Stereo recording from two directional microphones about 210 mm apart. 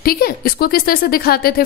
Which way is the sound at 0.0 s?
45° left (ahead or behind).